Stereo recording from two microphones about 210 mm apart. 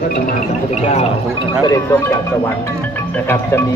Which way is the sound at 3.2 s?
10° left (ahead or behind).